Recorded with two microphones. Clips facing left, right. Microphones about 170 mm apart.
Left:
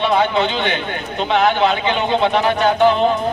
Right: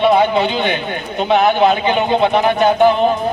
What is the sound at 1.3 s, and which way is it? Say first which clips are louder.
A man's voice: right 3 dB; 15° right (ahead or behind).